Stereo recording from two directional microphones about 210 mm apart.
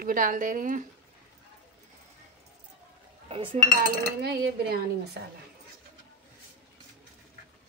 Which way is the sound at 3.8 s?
50° right (ahead or behind).